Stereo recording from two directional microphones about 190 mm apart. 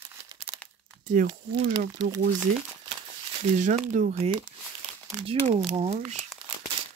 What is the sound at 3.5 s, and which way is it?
Speech, 40° right (ahead or behind).